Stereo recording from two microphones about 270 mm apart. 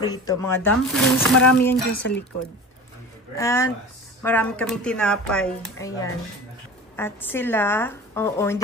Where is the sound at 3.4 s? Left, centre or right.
Centre.